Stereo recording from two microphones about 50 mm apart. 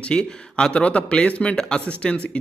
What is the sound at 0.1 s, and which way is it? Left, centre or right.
Speech, centre.